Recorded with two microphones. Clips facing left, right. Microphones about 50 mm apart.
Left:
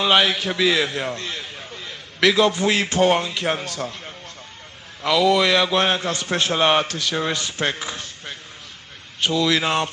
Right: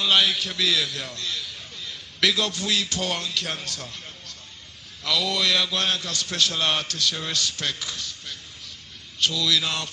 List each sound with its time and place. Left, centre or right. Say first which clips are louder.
0.0 s a man's voice: left 4 dB; left